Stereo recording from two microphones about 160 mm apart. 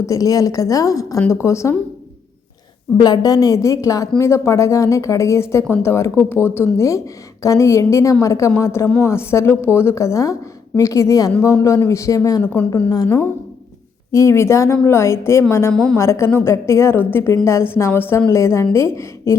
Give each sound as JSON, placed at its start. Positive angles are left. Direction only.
{"t": 0.1, "sound": "a woman's voice", "side_deg": 20}
{"t": 3.0, "sound": "a woman's voice", "side_deg": 25}
{"t": 12.4, "sound": "a woman's voice", "side_deg": 10}
{"t": 15.7, "sound": "a woman's voice", "side_deg": 5}
{"t": 16.0, "sound": "a woman's voice", "side_deg": 15}